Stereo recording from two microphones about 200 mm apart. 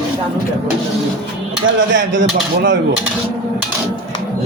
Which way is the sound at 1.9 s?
65° right (ahead or behind).